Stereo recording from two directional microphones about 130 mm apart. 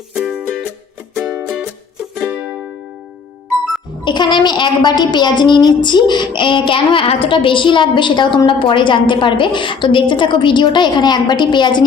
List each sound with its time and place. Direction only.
0.2 s music: 10° right (ahead or behind)
4.0 s a woman's voice: 35° left (ahead or behind)